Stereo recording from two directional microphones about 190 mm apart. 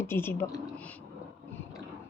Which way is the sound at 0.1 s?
10° left (ahead or behind).